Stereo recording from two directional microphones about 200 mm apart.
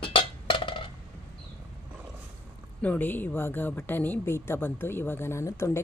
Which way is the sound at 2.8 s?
10° left (ahead or behind).